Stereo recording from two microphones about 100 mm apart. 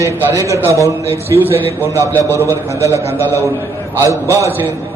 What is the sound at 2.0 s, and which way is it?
Speech, 25° left (ahead or behind).